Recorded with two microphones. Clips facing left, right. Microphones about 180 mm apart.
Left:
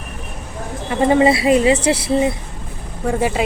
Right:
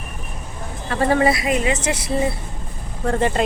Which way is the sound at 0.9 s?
15° left (ahead or behind).